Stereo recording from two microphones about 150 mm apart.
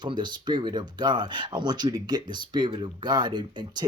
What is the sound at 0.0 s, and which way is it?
Speech, 30° right (ahead or behind).